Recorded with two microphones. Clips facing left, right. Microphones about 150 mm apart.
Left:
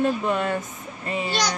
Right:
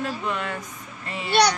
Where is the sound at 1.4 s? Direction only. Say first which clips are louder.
Right 10 dB; 65° right (ahead or behind).